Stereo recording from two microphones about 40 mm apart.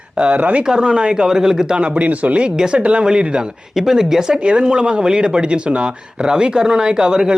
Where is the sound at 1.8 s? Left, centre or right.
Right.